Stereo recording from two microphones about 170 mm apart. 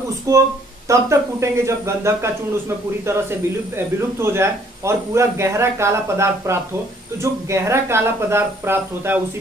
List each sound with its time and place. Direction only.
0.3 s speech: 20° right (ahead or behind)